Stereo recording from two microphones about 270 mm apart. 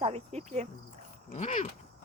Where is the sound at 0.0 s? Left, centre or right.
Right.